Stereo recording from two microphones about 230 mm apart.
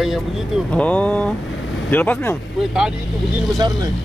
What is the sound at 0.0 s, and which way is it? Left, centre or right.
Speech, centre.